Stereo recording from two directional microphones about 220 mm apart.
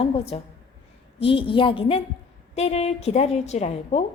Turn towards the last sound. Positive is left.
turn(degrees=30)  # may be behind; listen again after turning